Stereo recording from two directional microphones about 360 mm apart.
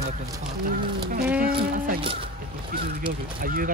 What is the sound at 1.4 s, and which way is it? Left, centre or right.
Music, right.